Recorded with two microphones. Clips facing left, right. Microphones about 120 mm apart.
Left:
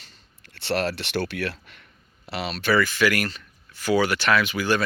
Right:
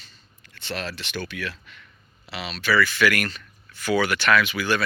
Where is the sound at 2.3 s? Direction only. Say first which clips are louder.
Left 2 dB; 50° left (ahead or behind).